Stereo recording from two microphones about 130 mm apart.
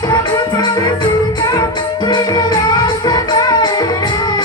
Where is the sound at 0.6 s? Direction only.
35° left (ahead or behind).